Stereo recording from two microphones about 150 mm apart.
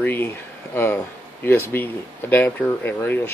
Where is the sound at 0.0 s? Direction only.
15° left (ahead or behind).